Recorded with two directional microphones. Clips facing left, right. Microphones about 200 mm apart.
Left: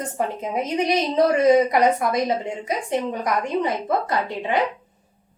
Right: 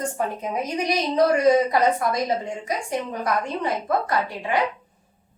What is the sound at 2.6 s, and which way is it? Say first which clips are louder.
A woman's voice: left 4 dB; 20° left (ahead or behind).